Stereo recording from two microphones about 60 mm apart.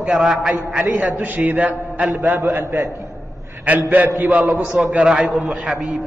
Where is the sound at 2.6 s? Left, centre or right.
Right.